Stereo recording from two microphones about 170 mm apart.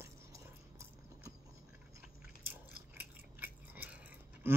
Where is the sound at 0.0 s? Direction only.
15° right (ahead or behind).